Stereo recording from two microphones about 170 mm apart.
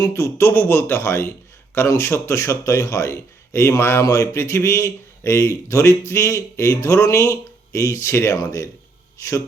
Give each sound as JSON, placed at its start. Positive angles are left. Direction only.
{"t": 0.0, "sound": "a man's voice", "side_deg": 15}